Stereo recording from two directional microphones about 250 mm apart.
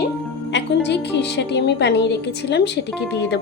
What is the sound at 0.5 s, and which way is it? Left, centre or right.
A woman's voice, left.